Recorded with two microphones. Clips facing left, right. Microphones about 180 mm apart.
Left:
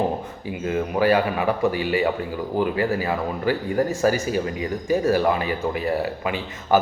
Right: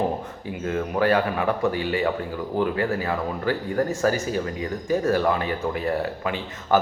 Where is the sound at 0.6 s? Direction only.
5° left (ahead or behind).